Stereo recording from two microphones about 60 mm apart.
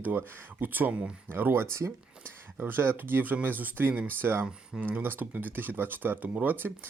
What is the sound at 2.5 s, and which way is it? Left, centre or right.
Speech, right.